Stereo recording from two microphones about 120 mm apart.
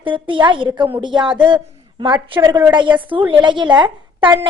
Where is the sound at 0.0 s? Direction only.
45° right (ahead or behind).